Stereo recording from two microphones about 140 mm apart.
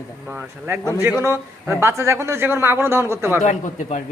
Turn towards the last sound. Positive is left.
turn(degrees=60)  # may be behind; listen again after turning